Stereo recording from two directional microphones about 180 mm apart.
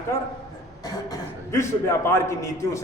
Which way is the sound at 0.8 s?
20° left (ahead or behind).